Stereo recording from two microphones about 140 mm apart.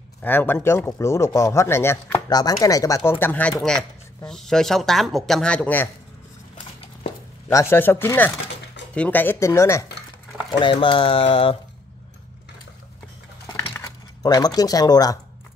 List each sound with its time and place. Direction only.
0.2 s speech: 15° left (ahead or behind)
7.5 s speech: 15° left (ahead or behind)
10.6 s speech: 35° left (ahead or behind)
13.7 s speech: 25° left (ahead or behind)